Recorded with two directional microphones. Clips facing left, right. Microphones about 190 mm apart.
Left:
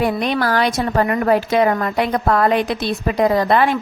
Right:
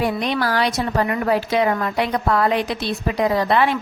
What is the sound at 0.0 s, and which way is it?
A woman's voice, 50° left (ahead or behind).